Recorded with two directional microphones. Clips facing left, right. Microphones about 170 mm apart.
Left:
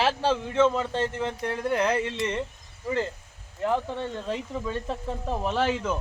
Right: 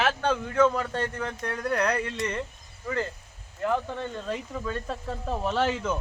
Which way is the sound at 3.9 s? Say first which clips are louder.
Left 1 dB; 25° left (ahead or behind).